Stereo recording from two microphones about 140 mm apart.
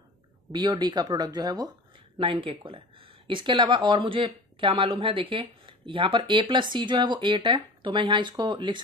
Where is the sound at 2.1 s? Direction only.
40° right (ahead or behind).